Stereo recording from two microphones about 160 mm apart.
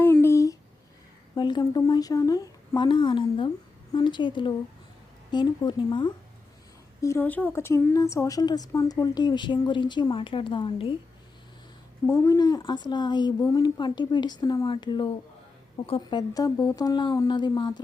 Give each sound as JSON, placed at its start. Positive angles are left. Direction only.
{"t": 0.0, "sound": "a sound", "side_deg": 15}
{"t": 1.4, "sound": "speech", "side_deg": 30}
{"t": 7.0, "sound": "speech", "side_deg": 15}
{"t": 12.0, "sound": "speech", "side_deg": 20}